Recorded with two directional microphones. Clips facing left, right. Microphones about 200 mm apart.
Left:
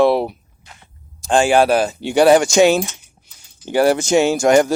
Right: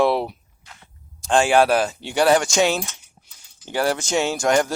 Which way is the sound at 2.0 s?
15° left (ahead or behind).